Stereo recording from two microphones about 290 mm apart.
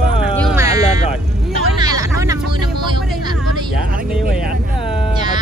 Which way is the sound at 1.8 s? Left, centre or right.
Centre.